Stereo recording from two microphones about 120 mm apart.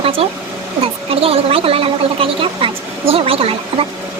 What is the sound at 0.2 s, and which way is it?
A woman's voice, 55° right (ahead or behind).